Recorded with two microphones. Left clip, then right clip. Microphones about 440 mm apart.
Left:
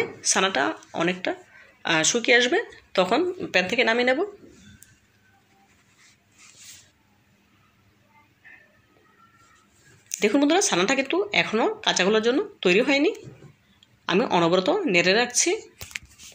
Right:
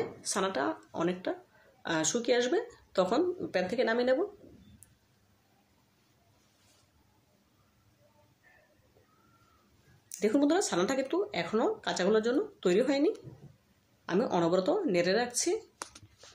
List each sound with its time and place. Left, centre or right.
0.2 s speech: left
10.1 s speech: left